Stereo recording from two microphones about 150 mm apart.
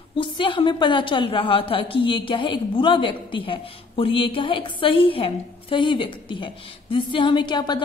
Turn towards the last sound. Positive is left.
turn(degrees=30)  # may be behind; listen again after turning